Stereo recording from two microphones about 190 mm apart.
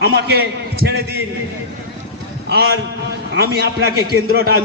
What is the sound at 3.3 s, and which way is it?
Speech, 60° right (ahead or behind).